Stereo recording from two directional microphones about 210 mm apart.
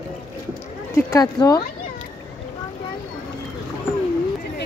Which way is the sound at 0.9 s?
15° left (ahead or behind).